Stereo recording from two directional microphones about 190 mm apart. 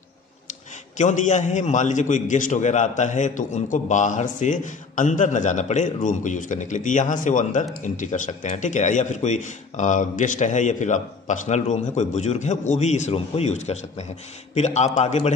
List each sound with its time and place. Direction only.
0.9 s a man's voice: 40° left (ahead or behind)